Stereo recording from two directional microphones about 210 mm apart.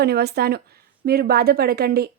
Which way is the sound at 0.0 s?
50° right (ahead or behind).